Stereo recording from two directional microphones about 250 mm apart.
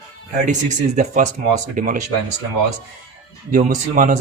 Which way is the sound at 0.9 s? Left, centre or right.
Right.